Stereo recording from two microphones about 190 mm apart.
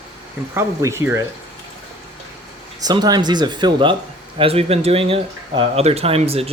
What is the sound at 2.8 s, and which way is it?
Speech, 20° right (ahead or behind).